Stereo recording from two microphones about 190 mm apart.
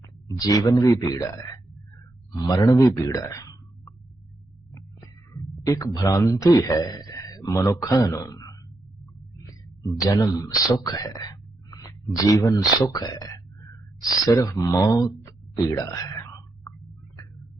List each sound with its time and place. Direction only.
0.3 s speech: 20° left (ahead or behind)
4.7 s music: 15° left (ahead or behind)
5.6 s a man's voice: 15° left (ahead or behind)
9.4 s a sound: 15° left (ahead or behind)
10.0 s speech: 15° left (ahead or behind)